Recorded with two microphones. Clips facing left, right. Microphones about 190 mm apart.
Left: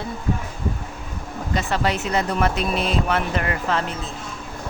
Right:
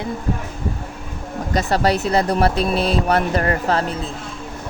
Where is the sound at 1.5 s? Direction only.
40° right (ahead or behind).